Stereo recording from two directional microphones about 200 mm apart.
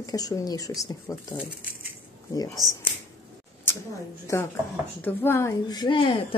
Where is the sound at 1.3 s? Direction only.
10° right (ahead or behind).